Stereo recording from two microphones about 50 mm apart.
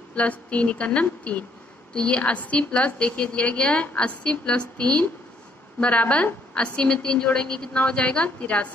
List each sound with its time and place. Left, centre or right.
0.1 s a woman's voice: left